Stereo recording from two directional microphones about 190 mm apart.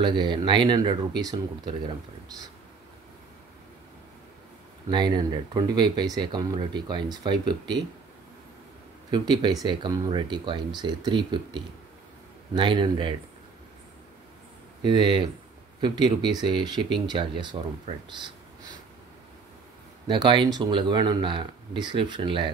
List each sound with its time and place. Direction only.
0.0 s speech: 25° right (ahead or behind)
4.9 s speech: 20° right (ahead or behind)
9.1 s speech: 20° right (ahead or behind)
14.8 s speech: 25° right (ahead or behind)
20.1 s speech: 25° right (ahead or behind)